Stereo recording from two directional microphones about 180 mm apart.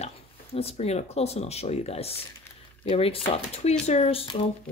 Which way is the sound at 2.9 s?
35° left (ahead or behind).